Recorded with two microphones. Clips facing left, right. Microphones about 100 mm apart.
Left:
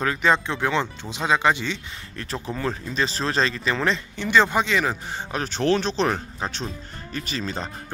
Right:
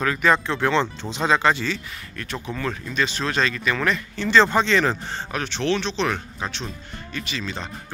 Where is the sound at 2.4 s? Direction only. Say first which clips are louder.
Left 1 dB; 30° left (ahead or behind).